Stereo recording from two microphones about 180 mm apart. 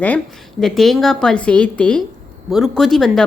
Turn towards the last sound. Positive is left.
turn(degrees=0)  # may be behind; listen again after turning